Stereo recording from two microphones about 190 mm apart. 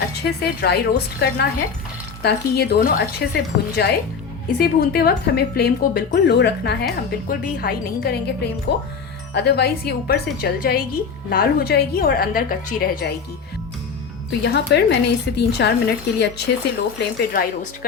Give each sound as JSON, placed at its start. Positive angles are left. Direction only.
{"t": 0.2, "sound": "a woman's voice", "side_deg": 60}
{"t": 14.3, "sound": "speech", "side_deg": 65}